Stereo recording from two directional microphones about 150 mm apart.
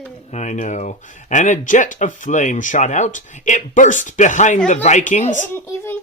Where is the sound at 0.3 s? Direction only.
50° left (ahead or behind).